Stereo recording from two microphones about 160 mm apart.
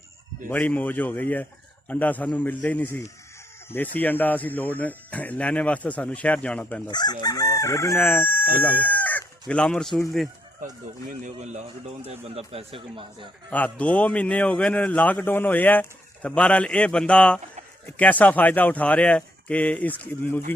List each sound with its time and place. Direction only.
0.4 s a man's voice: 10° left (ahead or behind)
6.9 s chicken: 25° left (ahead or behind)
8.5 s speech: 10° left (ahead or behind)
11.1 s a man's voice: 50° right (ahead or behind); by 13.3 s 30° right (ahead or behind)
13.5 s a man's voice: 10° left (ahead or behind)